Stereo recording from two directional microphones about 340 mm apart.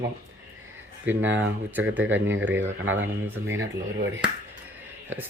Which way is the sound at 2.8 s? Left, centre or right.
Right.